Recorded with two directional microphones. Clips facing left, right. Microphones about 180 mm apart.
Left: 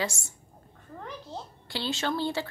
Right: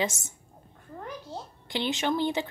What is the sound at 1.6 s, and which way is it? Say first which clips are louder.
Speech: right 3 dB; 20° right (ahead or behind).